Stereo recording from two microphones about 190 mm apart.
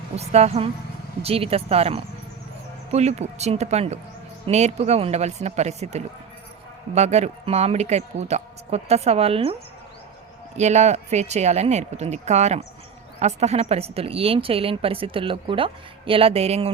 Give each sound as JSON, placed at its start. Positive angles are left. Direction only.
{"t": 0.2, "sound": "speech", "side_deg": -35}
{"t": 10.6, "sound": "a woman's voice", "side_deg": -35}